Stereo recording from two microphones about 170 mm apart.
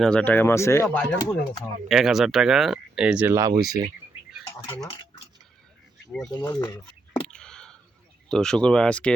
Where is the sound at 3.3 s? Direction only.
20° right (ahead or behind).